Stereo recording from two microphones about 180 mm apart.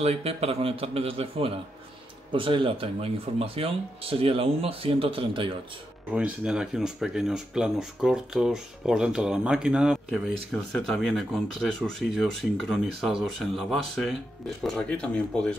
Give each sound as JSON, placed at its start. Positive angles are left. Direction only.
{"t": 0.0, "sound": "speech", "side_deg": -35}
{"t": 6.1, "sound": "speech", "side_deg": -5}